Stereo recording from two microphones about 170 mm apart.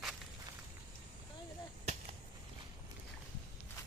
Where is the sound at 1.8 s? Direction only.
40° right (ahead or behind).